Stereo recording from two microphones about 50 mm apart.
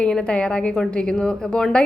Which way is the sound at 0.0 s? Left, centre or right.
Left.